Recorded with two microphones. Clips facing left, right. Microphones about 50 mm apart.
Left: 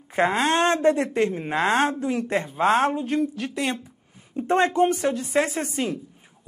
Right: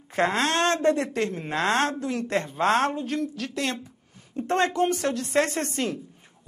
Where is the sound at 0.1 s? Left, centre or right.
Centre.